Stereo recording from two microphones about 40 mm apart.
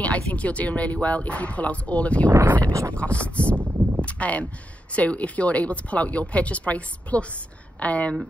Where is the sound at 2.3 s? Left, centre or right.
Right.